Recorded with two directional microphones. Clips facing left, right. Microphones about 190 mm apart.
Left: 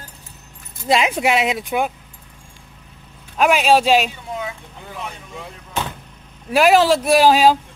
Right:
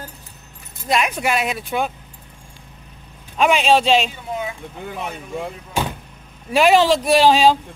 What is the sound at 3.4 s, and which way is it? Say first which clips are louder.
Speech: left 1 dB; 5° left (ahead or behind).